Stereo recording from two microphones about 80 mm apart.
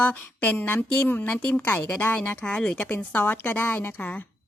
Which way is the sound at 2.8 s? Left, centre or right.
Left.